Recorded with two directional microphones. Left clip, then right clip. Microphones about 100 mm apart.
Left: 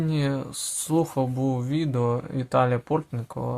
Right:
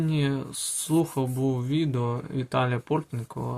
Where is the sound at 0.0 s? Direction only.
50° left (ahead or behind).